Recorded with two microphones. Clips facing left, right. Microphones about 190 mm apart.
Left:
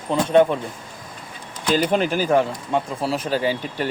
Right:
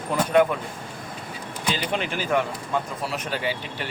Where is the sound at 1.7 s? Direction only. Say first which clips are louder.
Left 9 dB; 40° left (ahead or behind).